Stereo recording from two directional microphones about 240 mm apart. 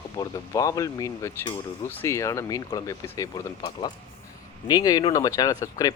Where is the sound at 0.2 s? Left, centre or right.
Centre.